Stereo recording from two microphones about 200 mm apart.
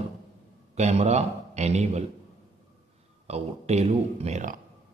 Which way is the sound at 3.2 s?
30° right (ahead or behind).